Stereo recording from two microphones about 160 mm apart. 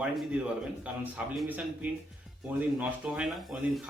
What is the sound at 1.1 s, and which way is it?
Speech, 10° right (ahead or behind).